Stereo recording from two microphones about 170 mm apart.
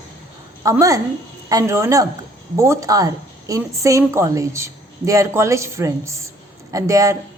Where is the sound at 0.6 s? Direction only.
20° right (ahead or behind).